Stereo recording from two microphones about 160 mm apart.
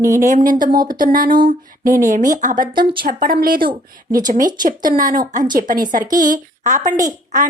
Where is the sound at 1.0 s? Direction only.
60° right (ahead or behind).